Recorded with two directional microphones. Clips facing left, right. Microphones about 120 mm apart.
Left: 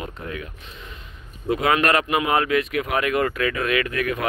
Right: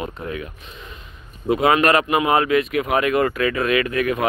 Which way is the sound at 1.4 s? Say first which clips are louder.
Right 4 dB; 25° right (ahead or behind).